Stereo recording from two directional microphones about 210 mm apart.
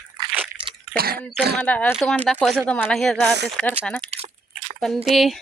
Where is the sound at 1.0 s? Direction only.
45° right (ahead or behind).